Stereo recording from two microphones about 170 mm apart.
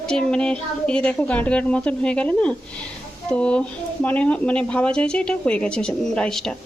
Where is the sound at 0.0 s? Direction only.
5° left (ahead or behind).